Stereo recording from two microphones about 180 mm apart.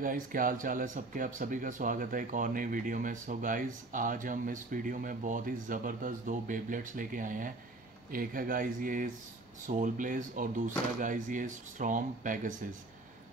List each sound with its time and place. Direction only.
0.0 s speech: 50° right (ahead or behind)